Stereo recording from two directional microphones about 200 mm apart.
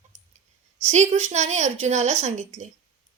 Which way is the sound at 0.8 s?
35° right (ahead or behind).